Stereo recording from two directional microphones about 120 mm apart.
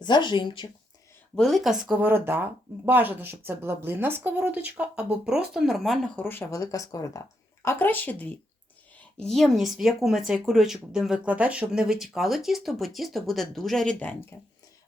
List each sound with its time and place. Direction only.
0.0 s speech: 40° left (ahead or behind)
1.4 s speech: centre (ahead or behind)
1.9 s speech: 15° right (ahead or behind); by 6.0 s centre (ahead or behind)
6.1 s speech: 15° left (ahead or behind)
7.6 s speech: 20° left (ahead or behind)